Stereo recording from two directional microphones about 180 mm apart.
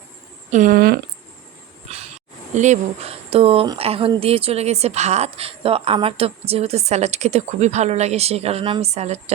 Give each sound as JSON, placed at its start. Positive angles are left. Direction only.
{"t": 0.5, "sound": "speech", "side_deg": -50}
{"t": 1.9, "sound": "a sound", "side_deg": -35}
{"t": 2.6, "sound": "a woman's voice", "side_deg": -40}